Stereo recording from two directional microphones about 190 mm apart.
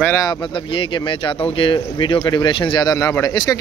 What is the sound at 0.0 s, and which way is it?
Speech, 15° left (ahead or behind).